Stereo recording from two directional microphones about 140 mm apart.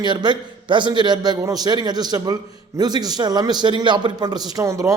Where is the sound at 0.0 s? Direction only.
30° right (ahead or behind).